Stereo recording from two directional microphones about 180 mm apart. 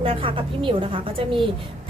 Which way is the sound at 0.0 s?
30° right (ahead or behind).